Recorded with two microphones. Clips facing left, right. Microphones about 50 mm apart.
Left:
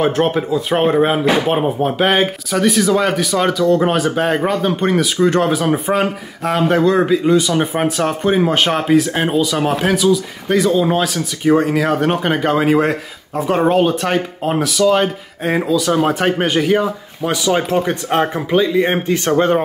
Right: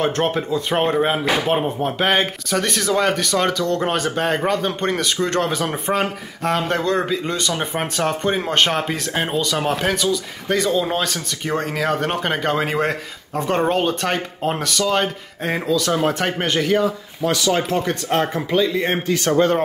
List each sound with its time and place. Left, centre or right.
0.0 s speech: centre